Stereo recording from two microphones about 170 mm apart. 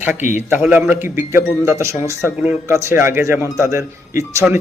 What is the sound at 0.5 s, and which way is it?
Speech, 10° right (ahead or behind).